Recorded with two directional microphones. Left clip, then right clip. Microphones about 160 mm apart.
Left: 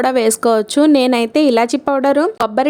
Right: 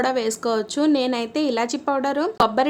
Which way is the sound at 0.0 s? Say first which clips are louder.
Left 8 dB; 50° left (ahead or behind).